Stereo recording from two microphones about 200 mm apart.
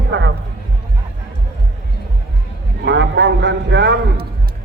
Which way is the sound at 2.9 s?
60° right (ahead or behind).